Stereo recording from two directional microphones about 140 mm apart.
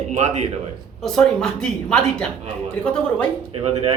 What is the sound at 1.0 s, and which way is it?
A woman's voice, 5° left (ahead or behind).